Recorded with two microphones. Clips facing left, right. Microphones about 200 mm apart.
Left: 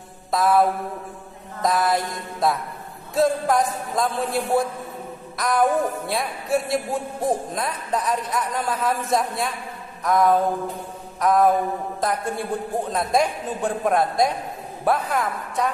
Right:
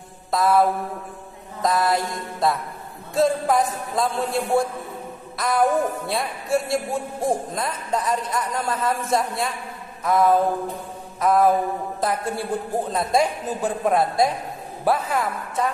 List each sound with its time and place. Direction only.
0.3 s speech: centre (ahead or behind)